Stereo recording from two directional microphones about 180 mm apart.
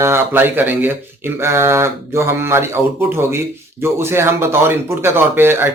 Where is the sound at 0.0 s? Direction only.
10° right (ahead or behind).